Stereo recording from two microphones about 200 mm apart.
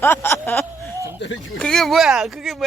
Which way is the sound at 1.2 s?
65° left (ahead or behind).